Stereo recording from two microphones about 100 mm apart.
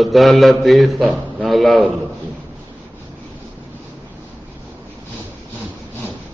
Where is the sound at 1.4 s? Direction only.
Centre (ahead or behind).